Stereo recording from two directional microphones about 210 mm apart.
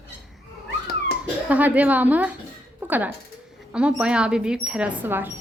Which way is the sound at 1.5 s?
5° right (ahead or behind).